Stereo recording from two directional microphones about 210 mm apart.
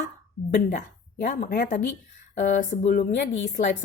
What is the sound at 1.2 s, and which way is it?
A woman's voice, 45° left (ahead or behind).